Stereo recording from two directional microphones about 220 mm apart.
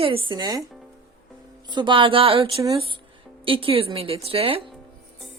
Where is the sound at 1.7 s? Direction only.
20° right (ahead or behind).